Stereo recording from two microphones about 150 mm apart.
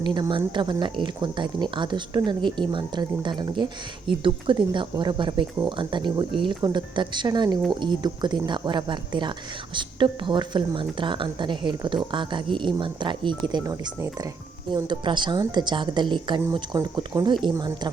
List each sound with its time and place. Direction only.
0.0 s speech: 30° right (ahead or behind)